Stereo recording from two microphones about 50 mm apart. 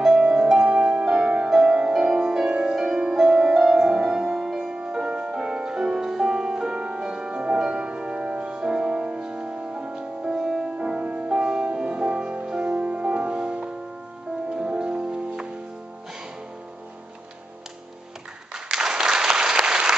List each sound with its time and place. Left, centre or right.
0.2 s music: right
4.7 s music: right
8.6 s music: centre
10.8 s music: right
18.5 s applause: centre